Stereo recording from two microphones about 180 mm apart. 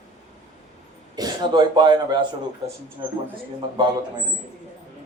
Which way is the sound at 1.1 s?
25° right (ahead or behind).